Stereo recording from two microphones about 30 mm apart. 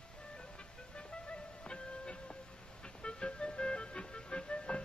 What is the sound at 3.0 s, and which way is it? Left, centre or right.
Music, left.